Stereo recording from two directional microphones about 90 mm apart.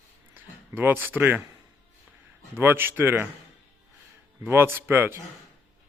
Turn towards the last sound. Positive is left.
turn(degrees=-25)  # may be behind; listen again after turning